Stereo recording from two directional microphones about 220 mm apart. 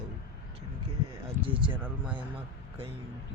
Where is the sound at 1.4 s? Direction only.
25° right (ahead or behind).